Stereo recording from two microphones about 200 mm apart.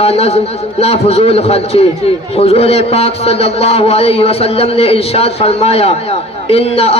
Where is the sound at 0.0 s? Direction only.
30° left (ahead or behind).